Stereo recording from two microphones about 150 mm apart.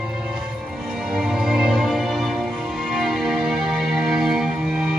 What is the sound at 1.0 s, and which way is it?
Music, centre (ahead or behind).